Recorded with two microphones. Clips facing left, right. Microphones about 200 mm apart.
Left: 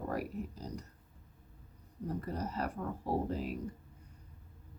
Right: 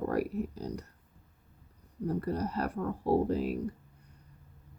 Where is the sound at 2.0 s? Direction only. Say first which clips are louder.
Right 6 dB; 65° right (ahead or behind).